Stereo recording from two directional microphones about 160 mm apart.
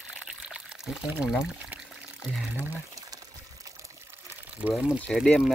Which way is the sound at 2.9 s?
20° right (ahead or behind).